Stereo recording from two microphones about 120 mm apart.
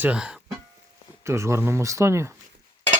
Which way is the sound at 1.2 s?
25° right (ahead or behind).